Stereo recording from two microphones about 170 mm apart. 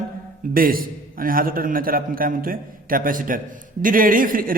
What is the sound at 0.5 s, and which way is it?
A man's voice, 55° right (ahead or behind).